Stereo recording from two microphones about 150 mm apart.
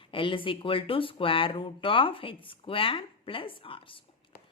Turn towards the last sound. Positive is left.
turn(degrees=35)  # may be behind; listen again after turning